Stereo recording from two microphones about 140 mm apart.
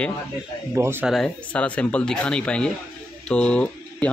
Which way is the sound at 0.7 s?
20° right (ahead or behind).